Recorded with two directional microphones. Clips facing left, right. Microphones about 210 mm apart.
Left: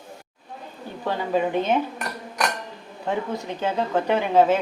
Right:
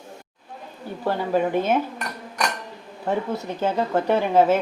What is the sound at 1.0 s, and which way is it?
Speech, 10° right (ahead or behind).